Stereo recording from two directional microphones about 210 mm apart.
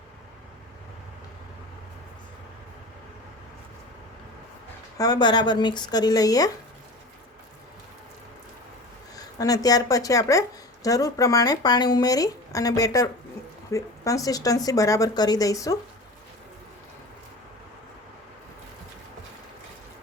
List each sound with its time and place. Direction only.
4.9 s speech: 20° left (ahead or behind)
9.1 s speech: 15° left (ahead or behind)